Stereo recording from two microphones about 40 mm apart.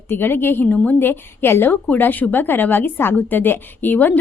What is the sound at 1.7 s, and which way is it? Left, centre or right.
A woman's voice, left.